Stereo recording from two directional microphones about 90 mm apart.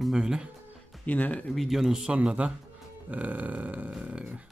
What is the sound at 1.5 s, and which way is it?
Grunt, centre (ahead or behind).